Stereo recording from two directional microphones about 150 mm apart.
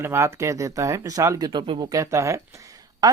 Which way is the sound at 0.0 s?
15° right (ahead or behind).